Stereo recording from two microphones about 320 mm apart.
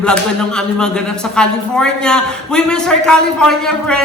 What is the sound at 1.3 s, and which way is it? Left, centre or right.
A woman's voice, centre.